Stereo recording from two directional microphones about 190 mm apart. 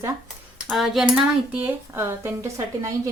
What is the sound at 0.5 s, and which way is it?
Speech, centre (ahead or behind).